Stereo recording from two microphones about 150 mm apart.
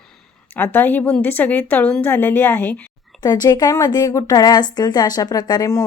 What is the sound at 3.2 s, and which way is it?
A woman's voice, 25° left (ahead or behind).